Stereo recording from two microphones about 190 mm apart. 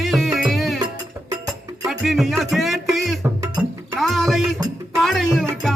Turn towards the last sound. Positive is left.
turn(degrees=0)  # may be behind; listen again after turning